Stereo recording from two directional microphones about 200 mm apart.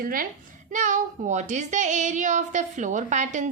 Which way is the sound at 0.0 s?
45° right (ahead or behind).